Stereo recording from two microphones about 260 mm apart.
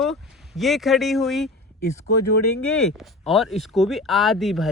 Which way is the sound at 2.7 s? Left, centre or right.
Centre.